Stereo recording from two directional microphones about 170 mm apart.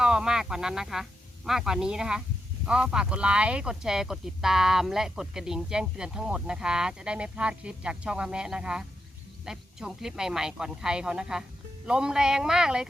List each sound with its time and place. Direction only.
0.0 s speech: 5° right (ahead or behind)